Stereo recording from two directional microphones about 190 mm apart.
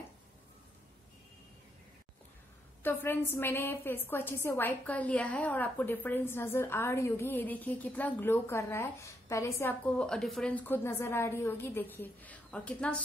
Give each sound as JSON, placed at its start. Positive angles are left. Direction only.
{"t": 2.8, "sound": "a woman's voice", "side_deg": 10}